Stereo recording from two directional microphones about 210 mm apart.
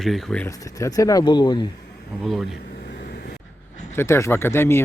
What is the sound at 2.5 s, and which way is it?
Vehicle, 50° left (ahead or behind).